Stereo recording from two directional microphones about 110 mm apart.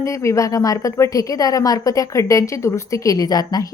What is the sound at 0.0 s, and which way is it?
A woman's voice, 30° left (ahead or behind).